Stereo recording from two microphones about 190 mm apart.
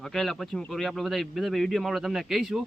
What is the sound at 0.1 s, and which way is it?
Speech, centre (ahead or behind).